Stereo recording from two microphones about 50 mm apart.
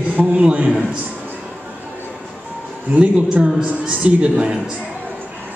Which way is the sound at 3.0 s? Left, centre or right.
Right.